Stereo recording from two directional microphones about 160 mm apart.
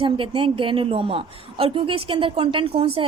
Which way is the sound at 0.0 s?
35° right (ahead or behind).